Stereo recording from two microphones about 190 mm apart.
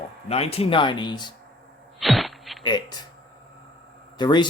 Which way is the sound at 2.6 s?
25° left (ahead or behind).